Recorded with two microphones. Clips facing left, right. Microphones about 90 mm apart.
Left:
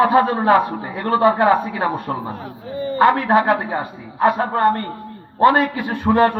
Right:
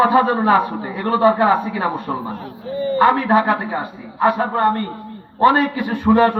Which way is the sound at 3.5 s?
20° left (ahead or behind).